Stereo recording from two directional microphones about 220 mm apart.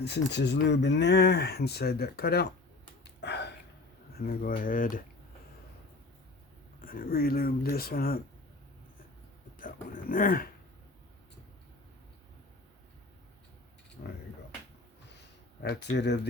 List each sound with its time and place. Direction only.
0.0 s speech: 50° left (ahead or behind)
3.0 s a sound: 50° left (ahead or behind)
4.2 s speech: 40° left (ahead or behind)
6.8 s speech: 40° left (ahead or behind)
9.6 s speech: 40° left (ahead or behind)
15.6 s speech: 45° left (ahead or behind)